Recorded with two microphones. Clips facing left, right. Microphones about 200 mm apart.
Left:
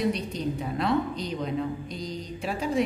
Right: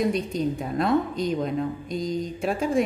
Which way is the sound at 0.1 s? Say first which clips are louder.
Right 4 dB; 45° right (ahead or behind).